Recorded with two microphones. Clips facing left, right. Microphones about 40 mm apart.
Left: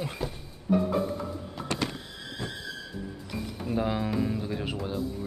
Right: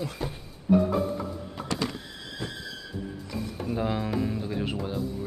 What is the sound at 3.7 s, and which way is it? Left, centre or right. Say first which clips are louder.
Speech: even; centre.